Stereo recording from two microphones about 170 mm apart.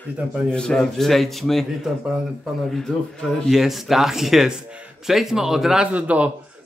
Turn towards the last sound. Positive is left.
turn(degrees=-10)  # may be behind; listen again after turning